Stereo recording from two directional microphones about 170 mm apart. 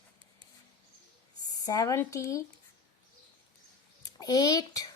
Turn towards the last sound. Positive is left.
turn(degrees=20)  # may be behind; listen again after turning